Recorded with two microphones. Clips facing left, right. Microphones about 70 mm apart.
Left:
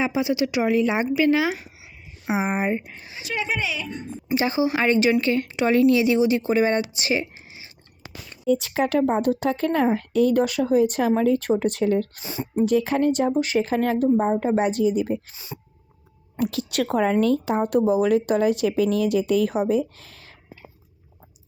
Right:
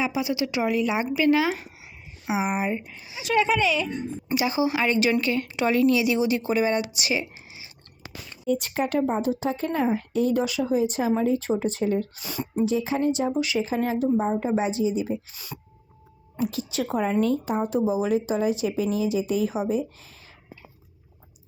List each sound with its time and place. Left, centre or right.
0.0 s speech: left
3.2 s speech: right
4.4 s speech: left
8.9 s a woman's voice: left
10.4 s a woman's voice: left
12.2 s speech: left
12.6 s speech: left
15.5 s a sound: centre
16.4 s a woman's voice: left